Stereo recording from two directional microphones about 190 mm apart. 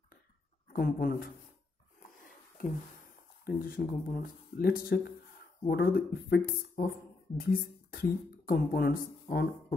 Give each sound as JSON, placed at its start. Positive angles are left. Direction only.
{"t": 0.7, "sound": "speech", "side_deg": 50}
{"t": 2.2, "sound": "a sound", "side_deg": 45}
{"t": 3.4, "sound": "speech", "side_deg": 50}
{"t": 7.9, "sound": "speech", "side_deg": 50}